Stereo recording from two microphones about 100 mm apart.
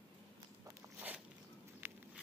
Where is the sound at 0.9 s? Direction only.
15° right (ahead or behind).